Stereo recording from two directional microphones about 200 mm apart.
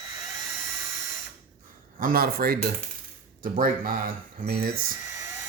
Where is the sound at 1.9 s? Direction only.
45° right (ahead or behind).